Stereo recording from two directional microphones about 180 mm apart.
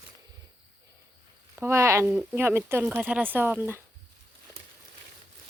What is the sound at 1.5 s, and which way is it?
Speech, 15° right (ahead or behind).